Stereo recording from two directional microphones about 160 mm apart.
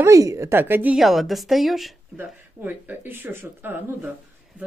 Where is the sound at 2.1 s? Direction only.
10° right (ahead or behind).